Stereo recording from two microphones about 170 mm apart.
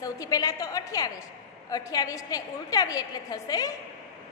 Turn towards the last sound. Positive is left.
turn(degrees=20)  # may be behind; listen again after turning